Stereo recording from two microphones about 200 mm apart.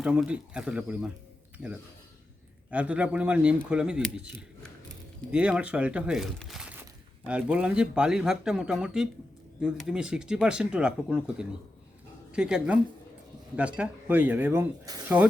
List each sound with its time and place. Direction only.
0.0 s speech: 5° right (ahead or behind)